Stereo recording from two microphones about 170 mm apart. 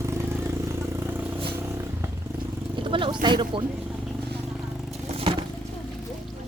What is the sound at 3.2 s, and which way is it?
Speech, 30° right (ahead or behind).